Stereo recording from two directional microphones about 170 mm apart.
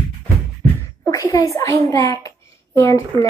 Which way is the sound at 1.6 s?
20° left (ahead or behind).